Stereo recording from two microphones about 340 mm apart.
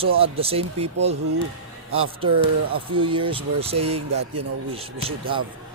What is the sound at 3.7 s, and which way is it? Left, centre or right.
Speech, right.